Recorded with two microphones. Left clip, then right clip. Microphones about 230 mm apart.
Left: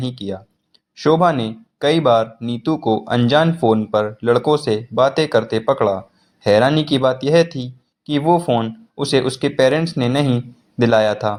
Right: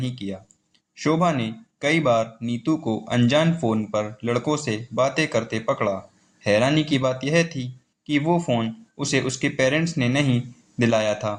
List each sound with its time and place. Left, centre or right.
0.0 s a man's voice: left